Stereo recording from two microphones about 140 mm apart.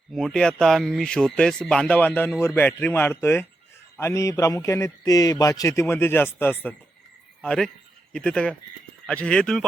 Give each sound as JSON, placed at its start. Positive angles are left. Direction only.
{"t": 0.1, "sound": "a man's voice", "side_deg": 5}